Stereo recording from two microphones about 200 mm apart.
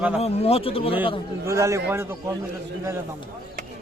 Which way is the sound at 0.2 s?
30° left (ahead or behind).